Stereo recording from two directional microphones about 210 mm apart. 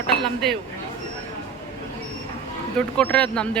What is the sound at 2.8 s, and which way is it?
Speech, 5° left (ahead or behind).